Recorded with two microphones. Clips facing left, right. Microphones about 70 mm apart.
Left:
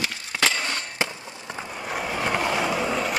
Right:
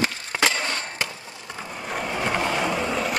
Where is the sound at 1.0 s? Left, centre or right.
Left.